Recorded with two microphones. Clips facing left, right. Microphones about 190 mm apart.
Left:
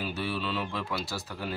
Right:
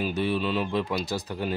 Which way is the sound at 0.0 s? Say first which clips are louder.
Right 6 dB; 20° right (ahead or behind).